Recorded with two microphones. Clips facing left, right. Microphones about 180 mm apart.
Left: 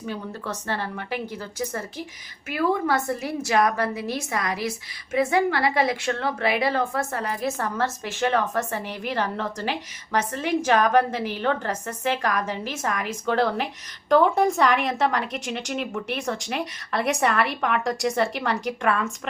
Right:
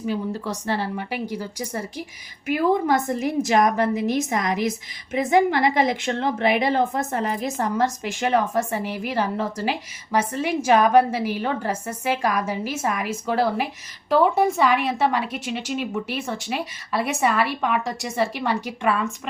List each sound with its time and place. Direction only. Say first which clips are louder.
0.0 s a woman's voice: right 6 dB; 10° right (ahead or behind)